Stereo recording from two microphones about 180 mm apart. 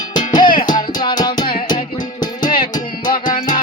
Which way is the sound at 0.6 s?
50° left (ahead or behind).